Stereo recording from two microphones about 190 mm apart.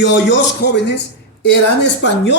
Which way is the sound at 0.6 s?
60° left (ahead or behind).